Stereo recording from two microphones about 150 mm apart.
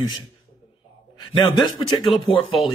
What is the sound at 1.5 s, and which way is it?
Speech, 30° left (ahead or behind).